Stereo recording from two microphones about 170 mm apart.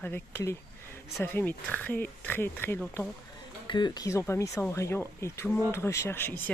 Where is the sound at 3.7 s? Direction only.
25° left (ahead or behind).